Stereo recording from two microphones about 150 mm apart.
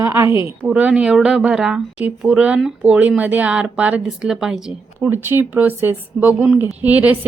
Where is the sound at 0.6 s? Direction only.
10° right (ahead or behind).